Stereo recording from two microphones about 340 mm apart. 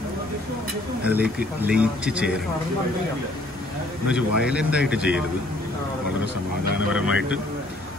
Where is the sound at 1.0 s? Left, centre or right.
Centre.